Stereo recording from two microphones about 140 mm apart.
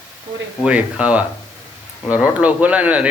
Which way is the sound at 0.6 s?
10° right (ahead or behind).